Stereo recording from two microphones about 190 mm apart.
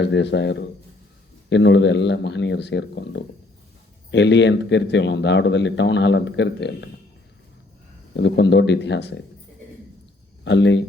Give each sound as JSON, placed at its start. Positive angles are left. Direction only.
{"t": 0.0, "sound": "speech", "side_deg": 65}
{"t": 8.1, "sound": "speech", "side_deg": 65}
{"t": 10.4, "sound": "speech", "side_deg": 70}